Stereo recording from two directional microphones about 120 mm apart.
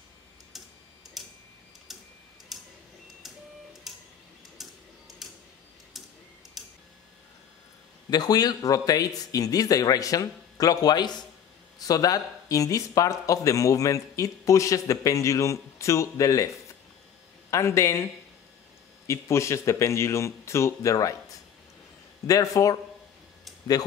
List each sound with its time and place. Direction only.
1.2 s tick-tock: centre (ahead or behind)
4.6 s printer: centre (ahead or behind)
5.2 s tick: centre (ahead or behind)
5.9 s tick-tock: centre (ahead or behind)
8.1 s speech: 35° left (ahead or behind)
22.2 s speech: 30° left (ahead or behind)